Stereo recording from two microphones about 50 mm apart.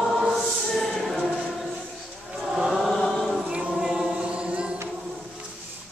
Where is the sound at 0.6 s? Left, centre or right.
Centre.